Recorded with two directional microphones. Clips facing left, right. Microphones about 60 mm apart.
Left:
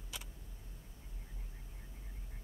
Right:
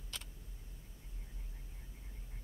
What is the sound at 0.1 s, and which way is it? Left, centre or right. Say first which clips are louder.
Tick: left 1 dB; centre.